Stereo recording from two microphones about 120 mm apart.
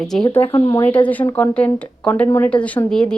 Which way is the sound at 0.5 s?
25° left (ahead or behind).